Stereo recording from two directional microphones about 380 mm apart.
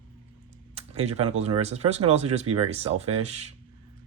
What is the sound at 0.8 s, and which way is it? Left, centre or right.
Speech, centre.